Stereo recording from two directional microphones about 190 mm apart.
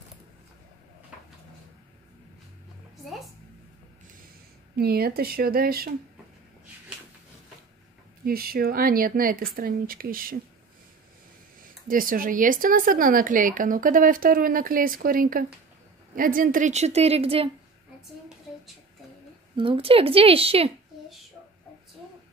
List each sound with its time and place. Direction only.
3.0 s a sound: centre (ahead or behind)
4.7 s speech: 55° right (ahead or behind)
8.3 s speech: 50° right (ahead or behind)
11.9 s a woman's voice: 45° right (ahead or behind); by 17.5 s 30° right (ahead or behind)
19.5 s a woman's voice: 30° right (ahead or behind)